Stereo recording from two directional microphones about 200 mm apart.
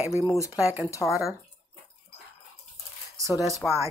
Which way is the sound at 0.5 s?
10° right (ahead or behind).